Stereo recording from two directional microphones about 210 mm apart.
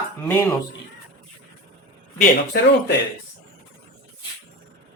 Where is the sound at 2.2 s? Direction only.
50° left (ahead or behind).